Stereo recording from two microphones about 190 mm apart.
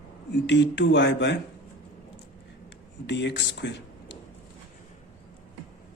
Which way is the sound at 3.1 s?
65° left (ahead or behind).